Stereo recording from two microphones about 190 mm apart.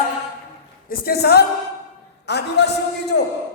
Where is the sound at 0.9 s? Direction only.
55° left (ahead or behind).